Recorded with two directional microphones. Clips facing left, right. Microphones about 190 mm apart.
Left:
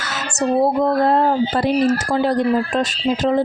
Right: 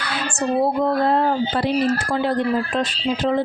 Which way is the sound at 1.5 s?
45° left (ahead or behind).